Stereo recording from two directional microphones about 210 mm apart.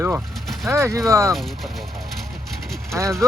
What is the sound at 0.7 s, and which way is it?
Speech, 15° right (ahead or behind).